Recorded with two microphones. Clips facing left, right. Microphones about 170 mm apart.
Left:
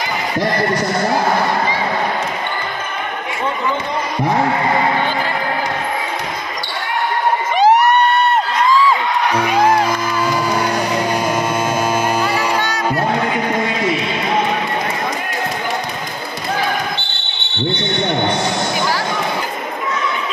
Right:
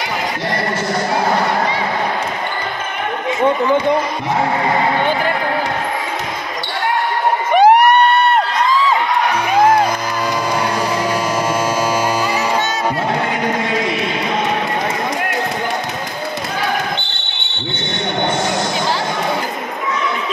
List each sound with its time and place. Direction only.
7.5 s a sound: 60° right (ahead or behind)
11.6 s mains hum: 55° left (ahead or behind)
12.4 s music: 20° right (ahead or behind)